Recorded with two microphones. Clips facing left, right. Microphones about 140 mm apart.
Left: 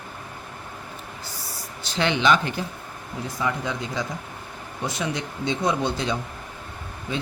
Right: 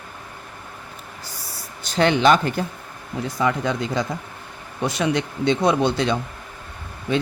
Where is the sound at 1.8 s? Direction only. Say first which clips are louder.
Right 5 dB; 45° right (ahead or behind).